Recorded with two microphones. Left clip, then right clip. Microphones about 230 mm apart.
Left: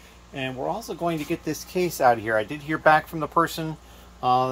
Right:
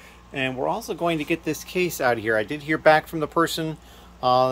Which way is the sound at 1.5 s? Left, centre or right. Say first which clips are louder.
Right 1 dB; right.